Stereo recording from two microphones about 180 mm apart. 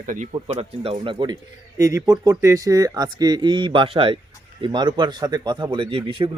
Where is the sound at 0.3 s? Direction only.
30° right (ahead or behind).